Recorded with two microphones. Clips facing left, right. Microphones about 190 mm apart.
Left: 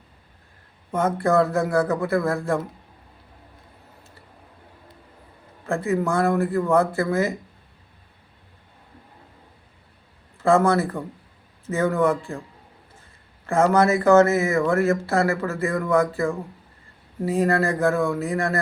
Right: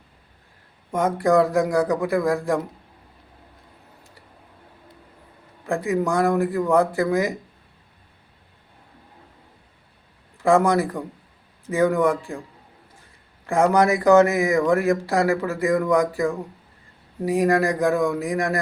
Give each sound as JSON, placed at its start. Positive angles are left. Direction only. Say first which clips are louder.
{"t": 0.9, "sound": "speech", "louder": "right 2 dB", "side_deg": -15}
{"t": 5.6, "sound": "speech", "louder": "right 1 dB", "side_deg": -15}
{"t": 10.3, "sound": "speech", "louder": "even", "side_deg": -15}
{"t": 13.5, "sound": "speech", "louder": "even", "side_deg": -15}